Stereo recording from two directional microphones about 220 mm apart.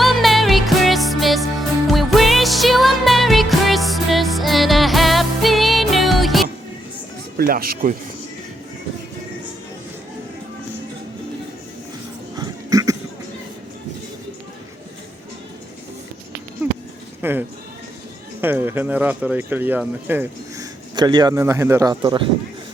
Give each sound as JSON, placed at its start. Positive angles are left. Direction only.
{"t": 0.0, "sound": "music", "side_deg": 0}
{"t": 7.3, "sound": "speech", "side_deg": -40}
{"t": 12.4, "sound": "a sound", "side_deg": -15}
{"t": 16.6, "sound": "a sound", "side_deg": -5}
{"t": 17.2, "sound": "speech", "side_deg": -10}
{"t": 20.9, "sound": "speech", "side_deg": -20}